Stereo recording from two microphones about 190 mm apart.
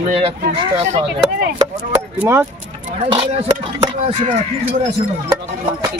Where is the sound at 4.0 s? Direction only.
35° right (ahead or behind).